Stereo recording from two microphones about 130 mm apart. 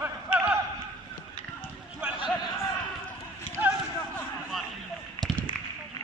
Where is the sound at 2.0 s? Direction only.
10° right (ahead or behind).